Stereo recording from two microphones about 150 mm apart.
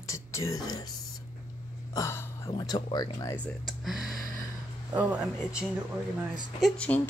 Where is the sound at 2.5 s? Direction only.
25° left (ahead or behind).